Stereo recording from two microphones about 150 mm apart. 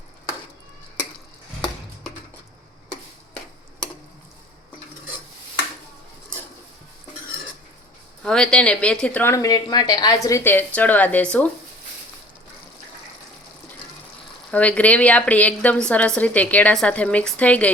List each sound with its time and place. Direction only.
8.2 s speech: 5° left (ahead or behind)
9.3 s a woman's voice: 20° left (ahead or behind)
14.5 s a woman's voice: 10° left (ahead or behind)